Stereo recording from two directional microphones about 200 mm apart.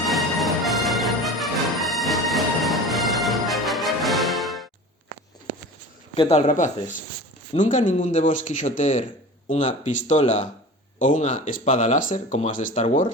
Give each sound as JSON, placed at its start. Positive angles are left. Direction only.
{"t": 0.1, "sound": "music", "side_deg": 0}
{"t": 6.1, "sound": "speech", "side_deg": 30}